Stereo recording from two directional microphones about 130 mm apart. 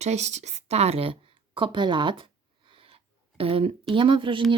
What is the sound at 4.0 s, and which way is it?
Speech, 40° right (ahead or behind).